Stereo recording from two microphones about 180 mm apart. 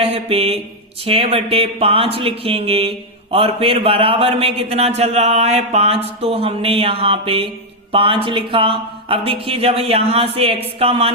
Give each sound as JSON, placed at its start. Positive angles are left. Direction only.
{"t": 0.0, "sound": "mantra", "side_deg": -35}
{"t": 1.0, "sound": "speech", "side_deg": -35}